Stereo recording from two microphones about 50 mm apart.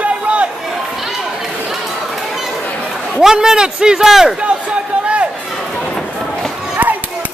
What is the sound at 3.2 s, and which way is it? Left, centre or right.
Speech, centre.